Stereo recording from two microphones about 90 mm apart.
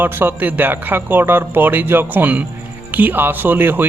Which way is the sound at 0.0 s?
20° right (ahead or behind).